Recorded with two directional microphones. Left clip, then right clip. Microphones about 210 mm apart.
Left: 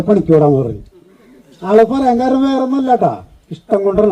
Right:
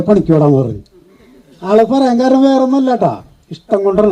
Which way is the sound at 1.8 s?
45° right (ahead or behind).